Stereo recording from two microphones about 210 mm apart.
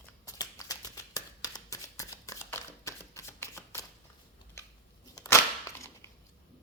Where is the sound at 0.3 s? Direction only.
15° left (ahead or behind).